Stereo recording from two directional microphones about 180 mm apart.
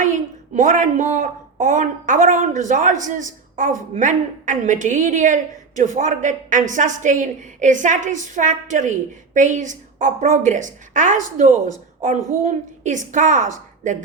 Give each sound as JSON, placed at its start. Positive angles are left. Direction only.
{"t": 0.0, "sound": "a woman's voice", "side_deg": -45}